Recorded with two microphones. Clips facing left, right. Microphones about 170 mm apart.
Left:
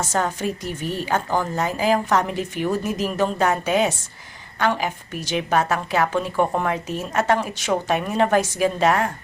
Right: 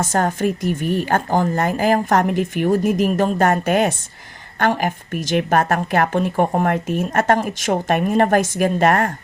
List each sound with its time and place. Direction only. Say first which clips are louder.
0.0 s speech: right 4 dB; 50° right (ahead or behind)